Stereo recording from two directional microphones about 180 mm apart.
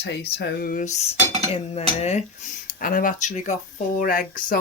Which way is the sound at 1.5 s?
35° left (ahead or behind).